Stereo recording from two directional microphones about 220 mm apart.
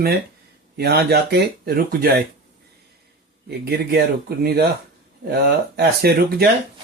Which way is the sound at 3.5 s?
45° right (ahead or behind).